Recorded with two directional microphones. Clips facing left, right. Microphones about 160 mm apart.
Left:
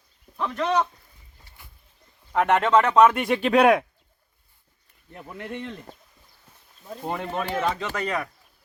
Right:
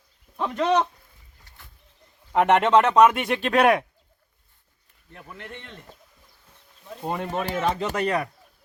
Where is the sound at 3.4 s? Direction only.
10° left (ahead or behind).